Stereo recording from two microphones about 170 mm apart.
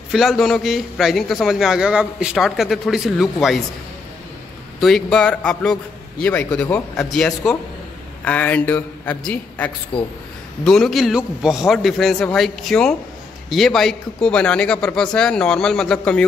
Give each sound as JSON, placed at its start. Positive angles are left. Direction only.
{"t": 0.1, "sound": "a man's voice", "side_deg": 0}
{"t": 4.7, "sound": "a man's voice", "side_deg": 0}
{"t": 9.9, "sound": "speech", "side_deg": 30}
{"t": 10.6, "sound": "a man's voice", "side_deg": 0}